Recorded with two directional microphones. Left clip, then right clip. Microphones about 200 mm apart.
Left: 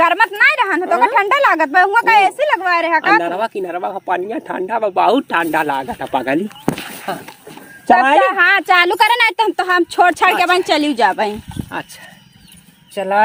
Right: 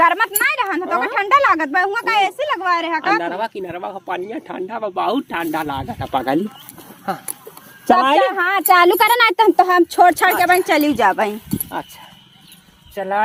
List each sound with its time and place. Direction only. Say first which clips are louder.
0.0 s a woman's voice: left 3 dB; 10° right (ahead or behind)
3.2 s speech: left 5 dB; 15° left (ahead or behind); by 6.4 s centre (ahead or behind)
7.9 s a woman's voice: left 4 dB; 10° right (ahead or behind)
8.6 s speech: even; centre (ahead or behind)
10.2 s speech: left 1 dB; 15° left (ahead or behind); by 11.3 s 5° right (ahead or behind)
12.9 s speech: left 5 dB; 15° left (ahead or behind)